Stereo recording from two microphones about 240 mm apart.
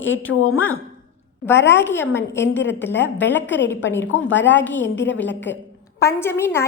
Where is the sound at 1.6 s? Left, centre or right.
Centre.